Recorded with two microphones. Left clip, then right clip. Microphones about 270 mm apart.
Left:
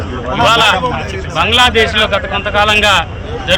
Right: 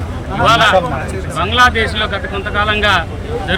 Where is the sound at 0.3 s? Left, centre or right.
Centre.